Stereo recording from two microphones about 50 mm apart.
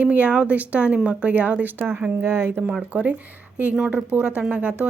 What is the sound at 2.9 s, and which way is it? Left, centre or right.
Speech, right.